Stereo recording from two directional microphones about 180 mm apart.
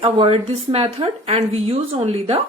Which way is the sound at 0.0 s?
30° right (ahead or behind).